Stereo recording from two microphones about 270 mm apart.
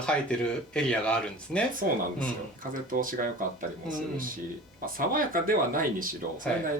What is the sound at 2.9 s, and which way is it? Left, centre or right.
Speech, right.